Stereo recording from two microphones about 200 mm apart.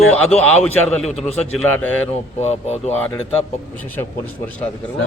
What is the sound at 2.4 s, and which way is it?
Speech, 35° left (ahead or behind).